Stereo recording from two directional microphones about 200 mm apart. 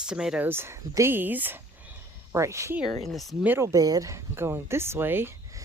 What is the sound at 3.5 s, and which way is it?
Speech, 15° right (ahead or behind).